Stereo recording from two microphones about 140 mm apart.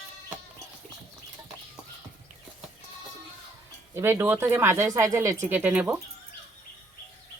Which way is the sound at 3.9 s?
15° right (ahead or behind).